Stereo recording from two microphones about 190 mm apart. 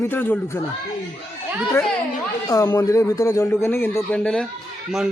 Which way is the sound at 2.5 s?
20° left (ahead or behind).